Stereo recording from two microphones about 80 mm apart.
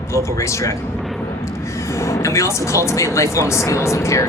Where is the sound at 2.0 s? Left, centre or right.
Left.